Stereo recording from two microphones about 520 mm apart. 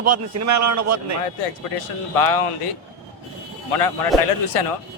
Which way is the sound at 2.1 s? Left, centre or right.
Left.